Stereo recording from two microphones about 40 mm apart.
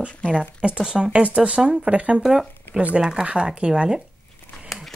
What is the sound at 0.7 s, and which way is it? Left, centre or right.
Speech, centre.